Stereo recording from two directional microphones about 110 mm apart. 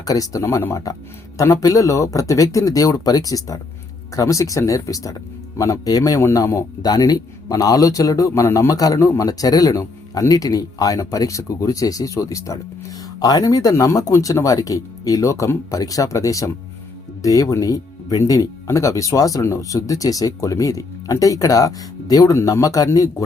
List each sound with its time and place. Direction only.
0.0 s speech: 30° left (ahead or behind)